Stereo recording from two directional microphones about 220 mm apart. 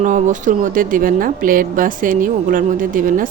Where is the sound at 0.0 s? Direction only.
35° right (ahead or behind).